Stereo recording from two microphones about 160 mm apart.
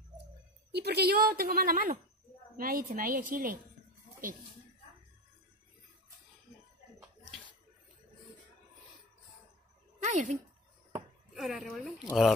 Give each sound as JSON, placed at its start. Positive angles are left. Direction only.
{"t": 0.7, "sound": "a woman's voice", "side_deg": -90}
{"t": 10.0, "sound": "a sound", "side_deg": -50}
{"t": 11.3, "sound": "speech", "side_deg": 0}